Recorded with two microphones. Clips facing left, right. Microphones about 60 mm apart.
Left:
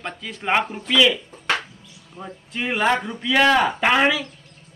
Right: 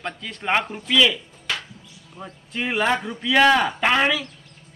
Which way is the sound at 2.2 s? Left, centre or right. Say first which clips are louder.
Even; centre.